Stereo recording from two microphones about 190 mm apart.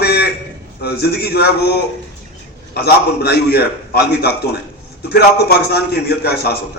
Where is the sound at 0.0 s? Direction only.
55° left (ahead or behind).